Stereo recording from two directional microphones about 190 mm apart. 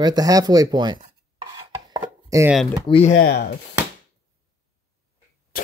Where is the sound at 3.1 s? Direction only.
55° left (ahead or behind).